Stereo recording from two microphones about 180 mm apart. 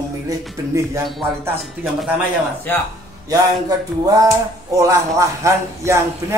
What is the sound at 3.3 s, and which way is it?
A man's voice, 20° right (ahead or behind).